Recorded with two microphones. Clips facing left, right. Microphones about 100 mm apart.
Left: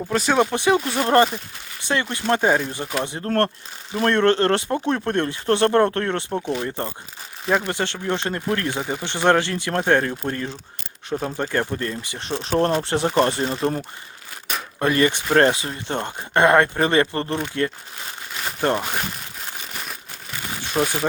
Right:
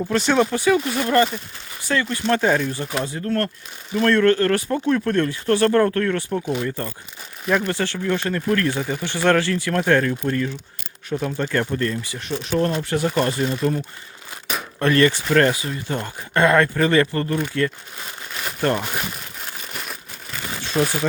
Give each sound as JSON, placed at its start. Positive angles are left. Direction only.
{"t": 0.5, "sound": "speech", "side_deg": 25}
{"t": 3.2, "sound": "speech", "side_deg": 35}
{"t": 3.9, "sound": "speech", "side_deg": 25}
{"t": 11.1, "sound": "speech", "side_deg": 15}
{"t": 14.8, "sound": "speech", "side_deg": 15}
{"t": 20.6, "sound": "speech", "side_deg": 15}